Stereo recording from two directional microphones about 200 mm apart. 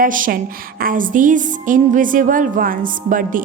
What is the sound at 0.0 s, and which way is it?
A woman's voice, 45° right (ahead or behind).